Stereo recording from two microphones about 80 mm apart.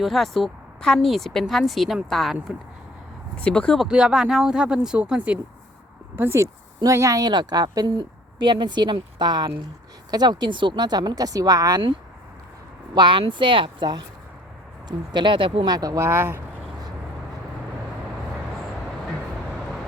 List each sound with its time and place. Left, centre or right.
0.0 s a woman's voice: centre
3.3 s speech: centre
3.8 s speech: centre
6.1 s speech: right
7.3 s speech: right
12.9 s speech: right
16.0 s speech: right